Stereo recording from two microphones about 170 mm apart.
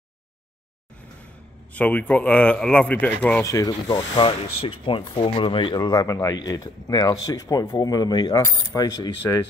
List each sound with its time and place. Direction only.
1.7 s a man's voice: 10° left (ahead or behind)